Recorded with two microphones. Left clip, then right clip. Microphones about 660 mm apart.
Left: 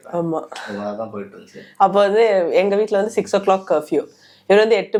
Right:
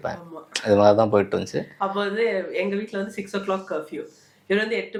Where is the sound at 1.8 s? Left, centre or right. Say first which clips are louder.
Left 11 dB; left.